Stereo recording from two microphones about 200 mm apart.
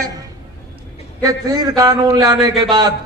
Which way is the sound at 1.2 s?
20° right (ahead or behind).